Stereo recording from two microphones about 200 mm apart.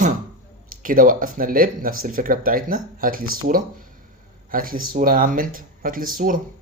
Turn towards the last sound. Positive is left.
turn(degrees=-45)  # may be behind; listen again after turning